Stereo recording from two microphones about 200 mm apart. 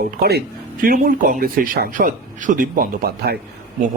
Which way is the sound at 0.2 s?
50° right (ahead or behind).